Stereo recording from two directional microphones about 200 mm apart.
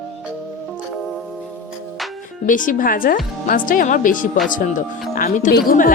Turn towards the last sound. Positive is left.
turn(degrees=50)  # may be behind; listen again after turning